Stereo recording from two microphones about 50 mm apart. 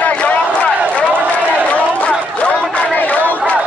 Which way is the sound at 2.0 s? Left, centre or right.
Left.